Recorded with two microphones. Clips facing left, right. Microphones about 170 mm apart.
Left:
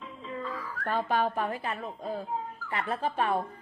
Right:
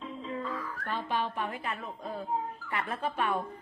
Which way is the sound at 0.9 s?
45° left (ahead or behind).